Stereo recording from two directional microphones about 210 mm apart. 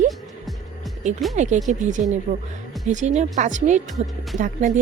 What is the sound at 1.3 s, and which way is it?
Speech, 35° right (ahead or behind).